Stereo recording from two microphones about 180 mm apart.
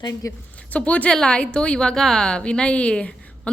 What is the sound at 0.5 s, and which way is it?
A woman's voice, 5° left (ahead or behind).